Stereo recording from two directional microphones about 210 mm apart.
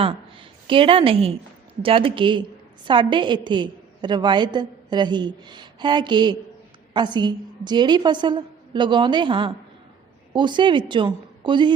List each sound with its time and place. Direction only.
0.0 s a woman's voice: 25° right (ahead or behind)